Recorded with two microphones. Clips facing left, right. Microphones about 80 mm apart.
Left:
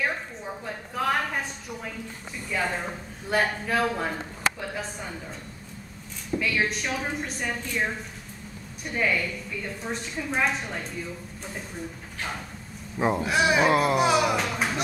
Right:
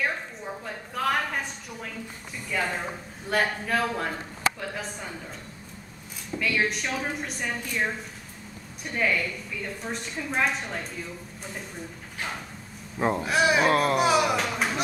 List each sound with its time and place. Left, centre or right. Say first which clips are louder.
0.0 s a sound: even; centre
2.5 s a woman's voice: even; centre
6.3 s a woman's voice: even; centre
13.0 s a woman's voice: even; centre